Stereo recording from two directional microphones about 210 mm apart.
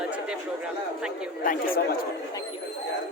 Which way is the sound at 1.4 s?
40° left (ahead or behind).